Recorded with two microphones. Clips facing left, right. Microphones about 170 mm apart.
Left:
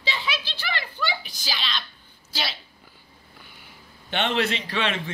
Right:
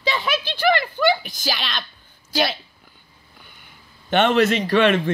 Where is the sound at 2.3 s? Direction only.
50° right (ahead or behind).